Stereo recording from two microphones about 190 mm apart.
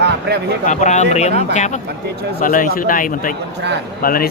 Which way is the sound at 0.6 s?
40° left (ahead or behind).